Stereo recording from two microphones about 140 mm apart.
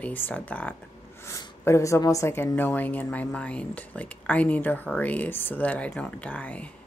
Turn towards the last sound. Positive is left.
turn(degrees=10)  # may be behind; listen again after turning